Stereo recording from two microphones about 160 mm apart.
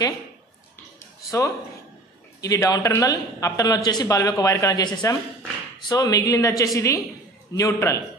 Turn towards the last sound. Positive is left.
turn(degrees=20)  # may be behind; listen again after turning